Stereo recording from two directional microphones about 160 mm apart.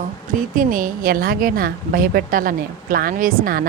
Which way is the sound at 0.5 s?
60° right (ahead or behind).